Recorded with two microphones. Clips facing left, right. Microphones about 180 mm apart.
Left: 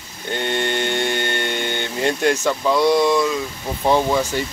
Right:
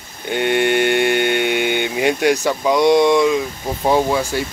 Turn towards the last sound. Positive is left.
turn(degrees=-10)  # may be behind; listen again after turning